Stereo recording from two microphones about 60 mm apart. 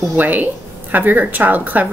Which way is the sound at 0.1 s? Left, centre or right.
Right.